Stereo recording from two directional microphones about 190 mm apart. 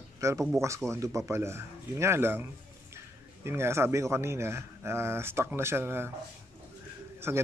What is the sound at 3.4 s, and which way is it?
Speech, 15° right (ahead or behind).